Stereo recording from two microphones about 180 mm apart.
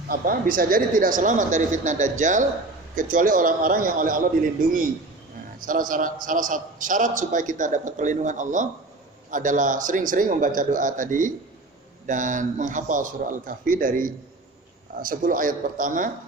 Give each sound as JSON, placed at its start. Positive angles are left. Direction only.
{"t": 0.1, "sound": "a man's voice", "side_deg": -50}